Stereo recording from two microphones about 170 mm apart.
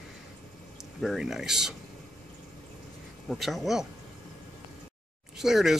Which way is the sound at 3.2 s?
Centre (ahead or behind).